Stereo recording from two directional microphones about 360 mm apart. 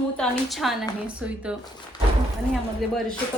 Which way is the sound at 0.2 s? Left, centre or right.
Centre.